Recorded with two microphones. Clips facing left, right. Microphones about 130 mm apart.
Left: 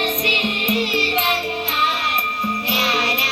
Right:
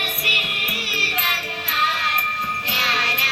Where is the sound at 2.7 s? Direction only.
15° left (ahead or behind).